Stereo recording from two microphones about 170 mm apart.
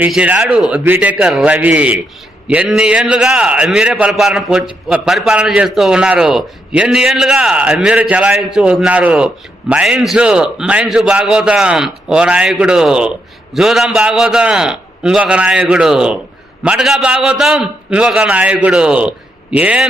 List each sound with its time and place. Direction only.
0.0 s a man's voice: 10° right (ahead or behind)